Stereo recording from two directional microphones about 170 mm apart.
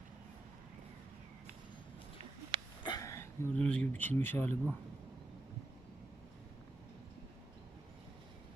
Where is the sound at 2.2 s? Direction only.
30° right (ahead or behind).